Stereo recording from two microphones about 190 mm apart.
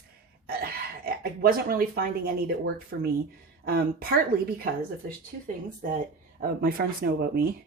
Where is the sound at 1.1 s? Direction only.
50° right (ahead or behind).